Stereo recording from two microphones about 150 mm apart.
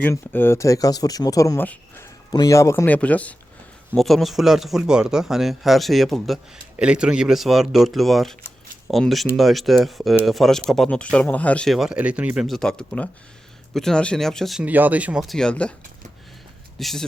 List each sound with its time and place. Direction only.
0.0 s speech: 15° left (ahead or behind)
1.6 s speech: 10° left (ahead or behind)
2.3 s speech: 25° left (ahead or behind); by 15.7 s 5° left (ahead or behind)
16.7 s speech: centre (ahead or behind)